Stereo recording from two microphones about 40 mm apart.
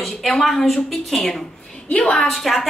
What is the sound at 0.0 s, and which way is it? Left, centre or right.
A woman's voice, centre.